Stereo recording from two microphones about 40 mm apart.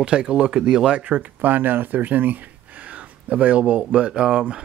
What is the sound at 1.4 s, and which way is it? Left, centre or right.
Speech, right.